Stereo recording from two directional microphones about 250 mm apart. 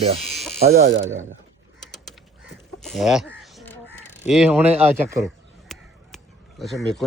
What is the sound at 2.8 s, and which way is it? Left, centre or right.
Crow, centre.